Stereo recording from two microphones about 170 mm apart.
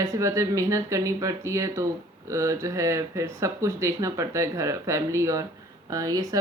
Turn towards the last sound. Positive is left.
turn(degrees=-20)  # may be behind; listen again after turning